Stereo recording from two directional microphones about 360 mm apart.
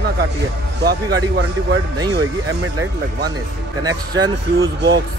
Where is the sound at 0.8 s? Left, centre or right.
Right.